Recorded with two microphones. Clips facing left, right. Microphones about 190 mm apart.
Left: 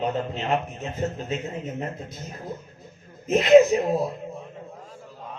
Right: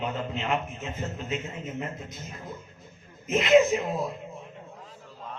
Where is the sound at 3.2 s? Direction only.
35° left (ahead or behind).